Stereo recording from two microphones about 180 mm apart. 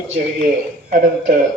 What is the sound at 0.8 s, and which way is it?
Speech, 50° right (ahead or behind).